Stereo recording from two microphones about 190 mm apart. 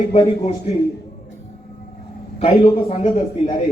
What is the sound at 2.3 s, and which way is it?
A man's voice, 30° left (ahead or behind).